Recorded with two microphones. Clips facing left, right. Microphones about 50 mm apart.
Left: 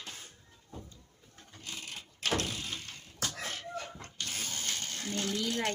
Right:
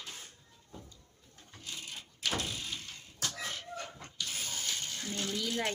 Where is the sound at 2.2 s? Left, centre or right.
Left.